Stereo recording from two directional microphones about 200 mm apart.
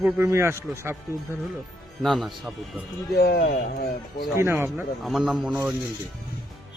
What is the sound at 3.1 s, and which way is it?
Speech, 50° left (ahead or behind).